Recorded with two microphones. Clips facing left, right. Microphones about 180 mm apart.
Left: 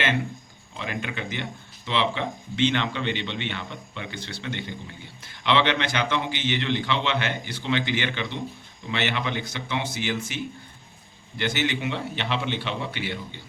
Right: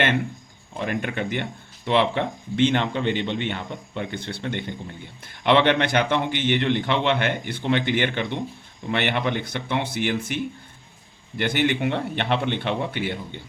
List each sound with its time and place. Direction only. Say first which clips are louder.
0.7 s speech: right 5 dB; 50° right (ahead or behind)